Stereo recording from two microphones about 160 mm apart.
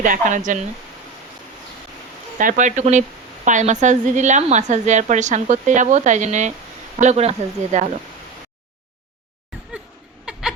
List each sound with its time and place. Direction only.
0.0 s a woman's voice: 55° right (ahead or behind)
2.4 s a woman's voice: 55° right (ahead or behind)
10.3 s a sound: 5° right (ahead or behind)